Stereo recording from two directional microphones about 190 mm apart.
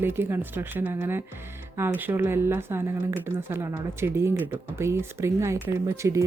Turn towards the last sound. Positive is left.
turn(degrees=-15)  # may be behind; listen again after turning